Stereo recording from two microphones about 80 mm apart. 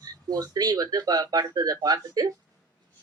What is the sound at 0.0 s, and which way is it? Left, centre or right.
Speech, right.